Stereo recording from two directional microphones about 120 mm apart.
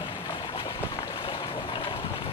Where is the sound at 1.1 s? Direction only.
45° left (ahead or behind).